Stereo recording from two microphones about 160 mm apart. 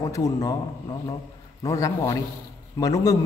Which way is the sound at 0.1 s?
20° left (ahead or behind).